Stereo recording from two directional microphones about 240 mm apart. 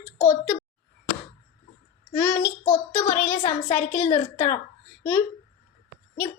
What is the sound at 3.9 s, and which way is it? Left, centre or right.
Speech, left.